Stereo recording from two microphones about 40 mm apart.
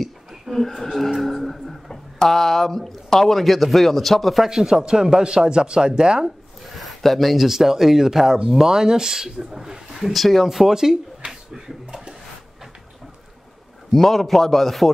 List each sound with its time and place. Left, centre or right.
0.0 s a sound: centre
1.2 s music: centre
1.9 s speech: centre
4.5 s speech: centre
6.8 s speech: centre
10.1 s speech: centre
13.9 s speech: centre